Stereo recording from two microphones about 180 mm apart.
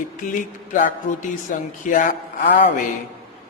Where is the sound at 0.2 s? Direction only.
45° left (ahead or behind).